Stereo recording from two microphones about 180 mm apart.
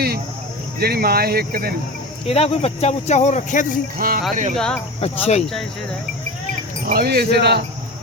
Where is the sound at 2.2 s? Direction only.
35° left (ahead or behind).